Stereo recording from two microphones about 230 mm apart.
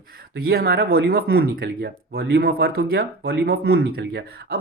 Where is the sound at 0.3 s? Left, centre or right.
Right.